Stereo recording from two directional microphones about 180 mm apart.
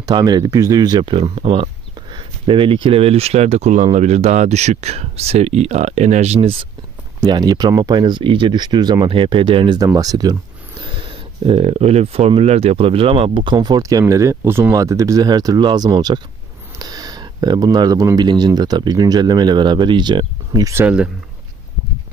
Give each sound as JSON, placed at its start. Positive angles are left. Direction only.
{"t": 0.0, "sound": "speech", "side_deg": -25}
{"t": 7.2, "sound": "speech", "side_deg": -25}